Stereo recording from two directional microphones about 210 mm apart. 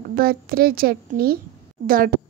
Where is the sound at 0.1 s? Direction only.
45° right (ahead or behind).